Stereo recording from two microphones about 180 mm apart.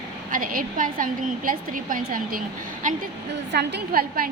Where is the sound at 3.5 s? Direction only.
70° right (ahead or behind).